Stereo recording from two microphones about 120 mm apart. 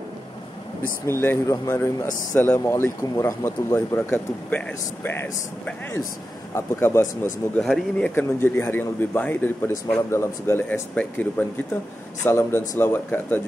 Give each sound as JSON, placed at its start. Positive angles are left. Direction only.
{"t": 1.0, "sound": "speech", "side_deg": 20}
{"t": 6.5, "sound": "speech", "side_deg": 20}
{"t": 7.5, "sound": "speech", "side_deg": 5}
{"t": 8.1, "sound": "speech", "side_deg": 15}